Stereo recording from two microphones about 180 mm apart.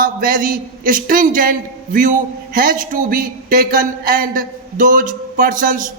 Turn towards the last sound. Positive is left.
turn(degrees=-50)  # may be behind; listen again after turning